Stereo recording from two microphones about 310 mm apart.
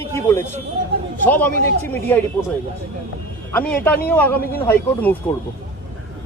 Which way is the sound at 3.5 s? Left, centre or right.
Centre.